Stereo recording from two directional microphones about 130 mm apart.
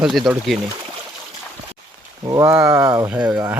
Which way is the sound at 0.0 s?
Centre (ahead or behind).